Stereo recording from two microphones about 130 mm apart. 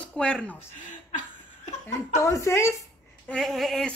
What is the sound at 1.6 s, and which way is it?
Chuckle, 65° left (ahead or behind).